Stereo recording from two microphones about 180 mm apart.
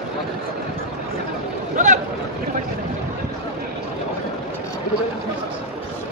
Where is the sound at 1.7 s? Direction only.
45° right (ahead or behind).